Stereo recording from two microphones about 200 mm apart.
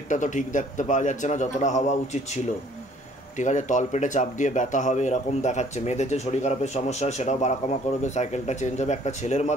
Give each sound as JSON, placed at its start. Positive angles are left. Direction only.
{"t": 0.1, "sound": "speech", "side_deg": 40}
{"t": 3.3, "sound": "speech", "side_deg": 35}